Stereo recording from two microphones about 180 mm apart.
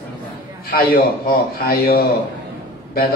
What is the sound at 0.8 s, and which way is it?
A man's voice, 55° left (ahead or behind).